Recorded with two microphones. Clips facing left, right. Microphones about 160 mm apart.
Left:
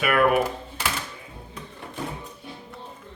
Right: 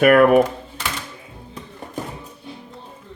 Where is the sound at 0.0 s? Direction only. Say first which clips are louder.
Right 8 dB; 45° right (ahead or behind).